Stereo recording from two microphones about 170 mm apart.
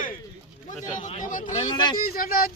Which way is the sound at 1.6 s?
25° left (ahead or behind).